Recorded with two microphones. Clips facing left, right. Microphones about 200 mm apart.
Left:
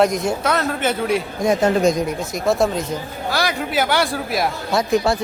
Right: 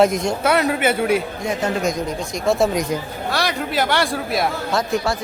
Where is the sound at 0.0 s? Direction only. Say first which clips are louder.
Right 1 dB; centre (ahead or behind).